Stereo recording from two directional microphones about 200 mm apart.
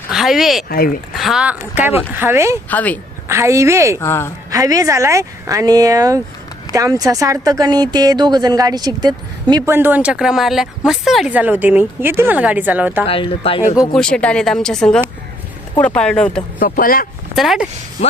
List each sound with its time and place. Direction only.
0.1 s speech: centre (ahead or behind)
0.7 s speech: 45° left (ahead or behind)
1.1 s speech: centre (ahead or behind)
2.6 s speech: 10° left (ahead or behind)
3.2 s speech: 15° right (ahead or behind)
4.0 s speech: 10° left (ahead or behind)
4.5 s speech: 15° right (ahead or behind)
13.1 s speech: 25° left (ahead or behind)
13.7 s speech: 5° left (ahead or behind)
16.6 s speech: 45° left (ahead or behind)
17.3 s speech: centre (ahead or behind)